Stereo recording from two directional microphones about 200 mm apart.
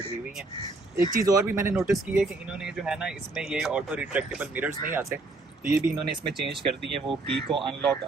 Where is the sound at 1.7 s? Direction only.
Centre (ahead or behind).